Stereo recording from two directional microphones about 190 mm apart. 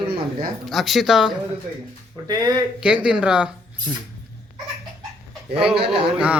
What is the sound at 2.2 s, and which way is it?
Speech, 20° right (ahead or behind).